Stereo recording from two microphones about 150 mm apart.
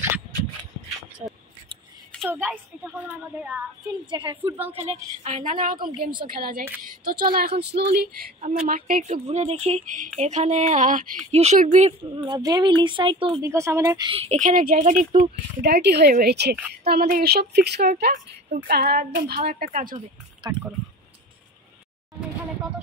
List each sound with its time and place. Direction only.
2.2 s a woman's voice: 10° right (ahead or behind)
4.0 s speech: 30° right (ahead or behind)
4.4 s a woman's voice: 10° right (ahead or behind)
5.2 s speech: 50° right (ahead or behind)
6.2 s a woman's voice: 75° right (ahead or behind)
8.4 s speech: 50° right (ahead or behind)
12.3 s speech: 25° right (ahead or behind)
13.4 s speech: 20° right (ahead or behind)
14.1 s speech: 40° right (ahead or behind)
14.4 s speech: 65° right (ahead or behind)
15.6 s a woman's voice: 90° right
18.1 s a woman's voice: 75° right (ahead or behind)
20.4 s speech: 30° right (ahead or behind)